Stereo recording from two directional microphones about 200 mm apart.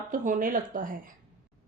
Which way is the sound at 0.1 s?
40° right (ahead or behind).